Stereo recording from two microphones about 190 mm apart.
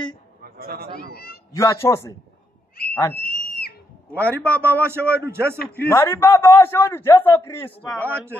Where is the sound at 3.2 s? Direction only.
50° left (ahead or behind).